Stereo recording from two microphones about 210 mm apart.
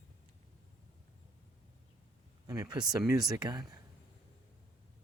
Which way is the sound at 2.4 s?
15° right (ahead or behind).